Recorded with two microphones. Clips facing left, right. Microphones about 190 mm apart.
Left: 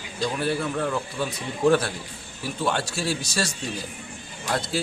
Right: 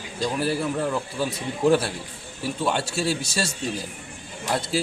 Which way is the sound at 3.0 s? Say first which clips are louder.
Right 1 dB; 25° right (ahead or behind).